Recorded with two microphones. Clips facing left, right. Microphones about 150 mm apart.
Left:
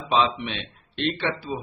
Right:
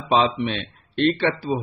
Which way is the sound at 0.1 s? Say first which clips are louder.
Right 3 dB; 40° right (ahead or behind).